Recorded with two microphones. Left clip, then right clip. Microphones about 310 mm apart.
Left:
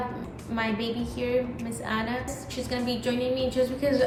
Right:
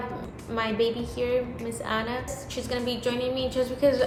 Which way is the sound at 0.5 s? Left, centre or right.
Centre.